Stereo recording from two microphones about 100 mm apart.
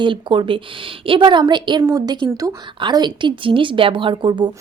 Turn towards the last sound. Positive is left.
turn(degrees=-50)  # may be behind; listen again after turning